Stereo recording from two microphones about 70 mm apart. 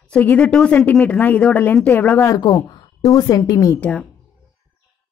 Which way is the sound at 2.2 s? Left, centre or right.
Left.